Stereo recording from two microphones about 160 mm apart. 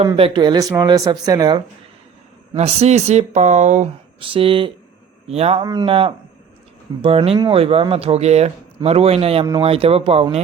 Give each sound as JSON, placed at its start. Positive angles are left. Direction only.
{"t": 0.2, "sound": "speech", "side_deg": -30}
{"t": 2.6, "sound": "speech", "side_deg": -40}
{"t": 4.2, "sound": "speech", "side_deg": -35}
{"t": 5.6, "sound": "speech", "side_deg": -30}